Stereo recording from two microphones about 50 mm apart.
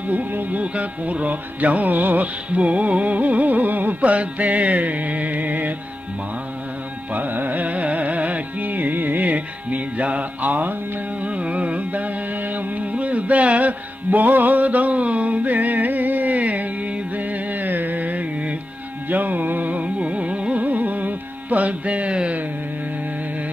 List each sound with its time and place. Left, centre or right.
0.1 s music: right
7.2 s carnatic music: right